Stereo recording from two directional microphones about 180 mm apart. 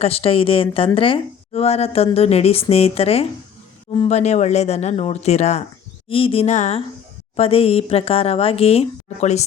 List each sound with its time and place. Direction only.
0.0 s a woman's voice: 35° left (ahead or behind)